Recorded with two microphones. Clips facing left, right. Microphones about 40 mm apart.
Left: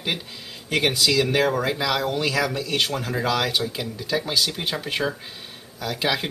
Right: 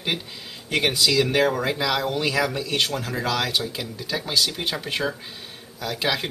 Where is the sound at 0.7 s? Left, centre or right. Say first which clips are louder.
Even; centre.